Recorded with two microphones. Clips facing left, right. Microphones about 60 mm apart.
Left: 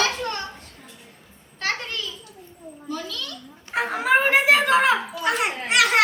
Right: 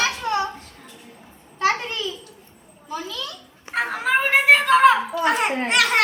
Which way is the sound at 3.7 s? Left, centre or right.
Centre.